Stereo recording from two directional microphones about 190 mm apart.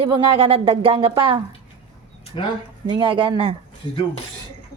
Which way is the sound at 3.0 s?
25° right (ahead or behind).